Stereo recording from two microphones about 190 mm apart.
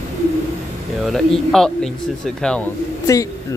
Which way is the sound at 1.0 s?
Centre (ahead or behind).